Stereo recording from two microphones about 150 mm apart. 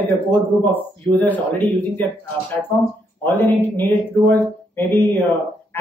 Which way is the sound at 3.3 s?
15° left (ahead or behind).